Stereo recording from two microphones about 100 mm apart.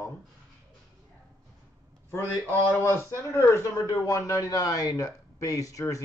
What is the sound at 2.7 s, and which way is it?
A man's voice, 25° left (ahead or behind).